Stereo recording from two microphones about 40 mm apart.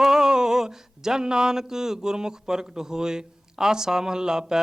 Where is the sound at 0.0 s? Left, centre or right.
Centre.